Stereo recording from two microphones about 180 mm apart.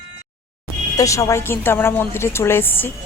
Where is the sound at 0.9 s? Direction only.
15° left (ahead or behind).